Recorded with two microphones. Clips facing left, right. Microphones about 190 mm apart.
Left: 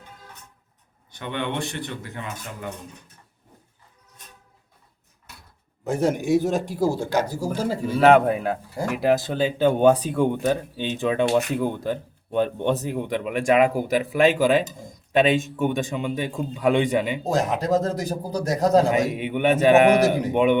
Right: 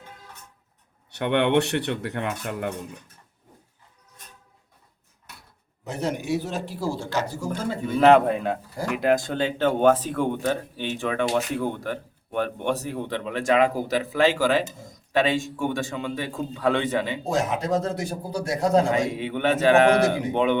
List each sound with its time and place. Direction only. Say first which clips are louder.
1.1 s speech: right 8 dB; 65° right (ahead or behind)
5.8 s a man's voice: left 6 dB; 45° left (ahead or behind)
7.9 s a man's voice: even; centre (ahead or behind)
17.3 s speech: left 2 dB; 35° left (ahead or behind)
18.9 s speech: left 2 dB; 20° left (ahead or behind)